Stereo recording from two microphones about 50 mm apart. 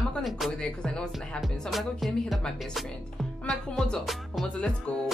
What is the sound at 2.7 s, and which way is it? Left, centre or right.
Speech, centre.